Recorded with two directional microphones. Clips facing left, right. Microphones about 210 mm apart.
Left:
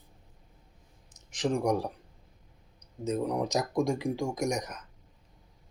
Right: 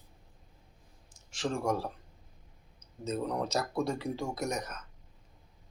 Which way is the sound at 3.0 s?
15° left (ahead or behind).